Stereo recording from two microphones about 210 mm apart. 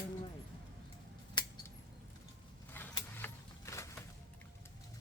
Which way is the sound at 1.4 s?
20° left (ahead or behind).